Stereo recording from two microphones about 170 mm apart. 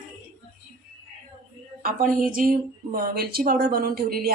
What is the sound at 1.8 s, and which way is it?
A woman's voice, 55° right (ahead or behind).